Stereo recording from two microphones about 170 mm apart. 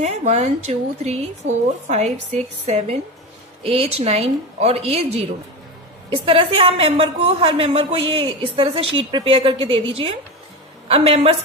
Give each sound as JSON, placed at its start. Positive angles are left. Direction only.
{"t": 0.0, "sound": "speech", "side_deg": -40}